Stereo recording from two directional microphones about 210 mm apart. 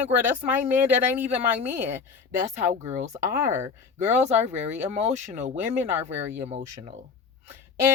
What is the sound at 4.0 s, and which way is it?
Speech, 35° right (ahead or behind).